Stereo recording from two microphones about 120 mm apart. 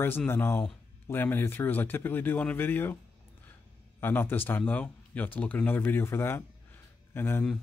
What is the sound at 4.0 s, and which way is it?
A man's voice, 15° left (ahead or behind).